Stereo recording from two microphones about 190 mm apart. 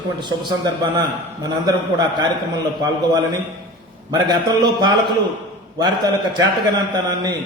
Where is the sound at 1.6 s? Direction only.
20° right (ahead or behind).